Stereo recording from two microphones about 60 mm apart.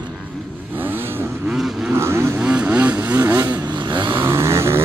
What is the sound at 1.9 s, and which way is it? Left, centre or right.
Vehicle, right.